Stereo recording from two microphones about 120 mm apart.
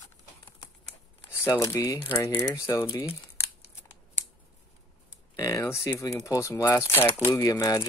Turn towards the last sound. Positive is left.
turn(degrees=30)  # may be behind; listen again after turning